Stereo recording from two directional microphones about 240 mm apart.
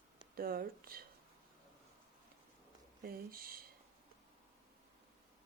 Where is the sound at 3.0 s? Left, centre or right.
Right.